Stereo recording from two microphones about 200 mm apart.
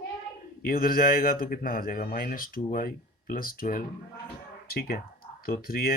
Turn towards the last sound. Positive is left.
turn(degrees=50)  # may be behind; listen again after turning